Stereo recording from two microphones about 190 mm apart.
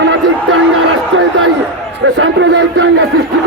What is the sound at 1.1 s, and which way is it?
A man's voice, 80° right.